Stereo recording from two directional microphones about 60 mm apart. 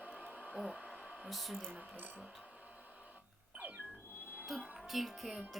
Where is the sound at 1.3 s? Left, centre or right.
Centre.